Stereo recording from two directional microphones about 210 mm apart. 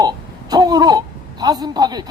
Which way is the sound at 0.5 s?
20° right (ahead or behind).